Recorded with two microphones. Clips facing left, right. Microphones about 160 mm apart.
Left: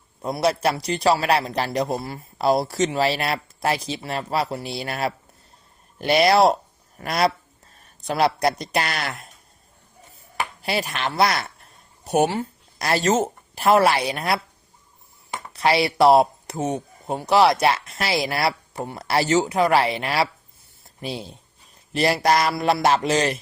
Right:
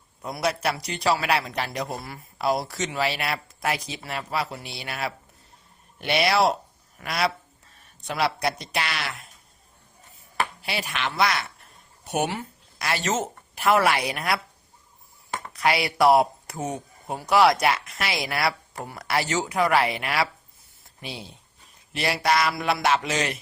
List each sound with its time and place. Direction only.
0.2 s a man's voice: 30° left (ahead or behind); by 9.2 s 45° left (ahead or behind)
10.6 s a man's voice: 40° left (ahead or behind)
15.5 s speech: 30° left (ahead or behind)
21.0 s a man's voice: 40° left (ahead or behind)